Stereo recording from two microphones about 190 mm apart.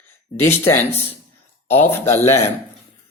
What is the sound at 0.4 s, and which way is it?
Speech, 15° left (ahead or behind).